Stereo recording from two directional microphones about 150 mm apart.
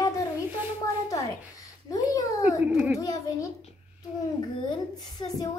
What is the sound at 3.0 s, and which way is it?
Speech, 20° left (ahead or behind).